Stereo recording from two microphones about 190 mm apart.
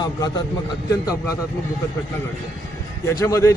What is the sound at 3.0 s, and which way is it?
Speech, 15° left (ahead or behind).